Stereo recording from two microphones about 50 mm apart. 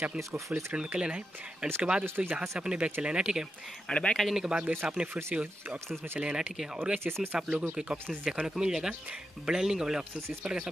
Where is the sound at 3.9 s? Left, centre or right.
Left.